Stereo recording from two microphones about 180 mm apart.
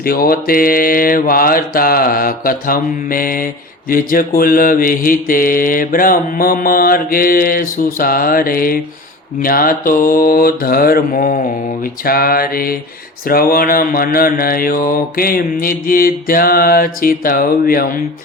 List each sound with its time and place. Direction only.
0.0 s mantra: 55° left (ahead or behind)
12.0 s a sound: 55° left (ahead or behind)
13.2 s mantra: 55° left (ahead or behind)